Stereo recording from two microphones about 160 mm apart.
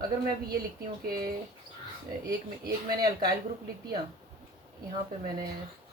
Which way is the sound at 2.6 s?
80° right.